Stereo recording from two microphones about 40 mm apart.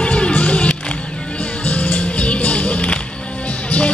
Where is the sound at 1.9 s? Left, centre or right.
Left.